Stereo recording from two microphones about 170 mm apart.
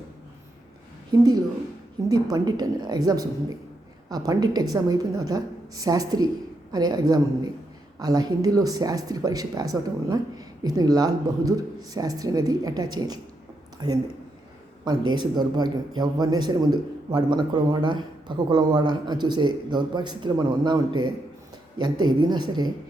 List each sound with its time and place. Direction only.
2.0 s a man's voice: 20° right (ahead or behind)